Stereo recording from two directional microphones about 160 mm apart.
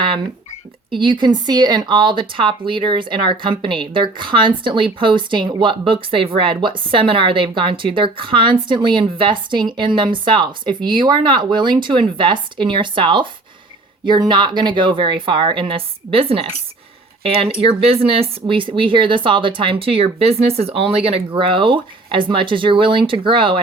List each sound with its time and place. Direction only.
0.9 s speech: 30° right (ahead or behind)